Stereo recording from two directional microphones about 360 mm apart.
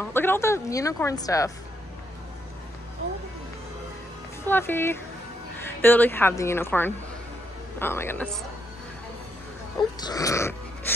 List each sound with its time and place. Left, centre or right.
0.0 s a woman's voice: centre
4.5 s a woman's voice: centre
9.9 s wheeze: centre